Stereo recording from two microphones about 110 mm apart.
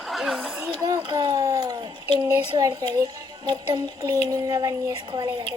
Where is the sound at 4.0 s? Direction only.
35° right (ahead or behind).